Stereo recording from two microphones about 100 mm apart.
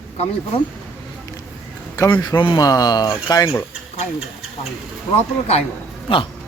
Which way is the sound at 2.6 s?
40° left (ahead or behind).